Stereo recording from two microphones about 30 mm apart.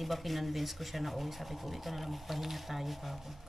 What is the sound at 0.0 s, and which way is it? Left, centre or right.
Speech, centre.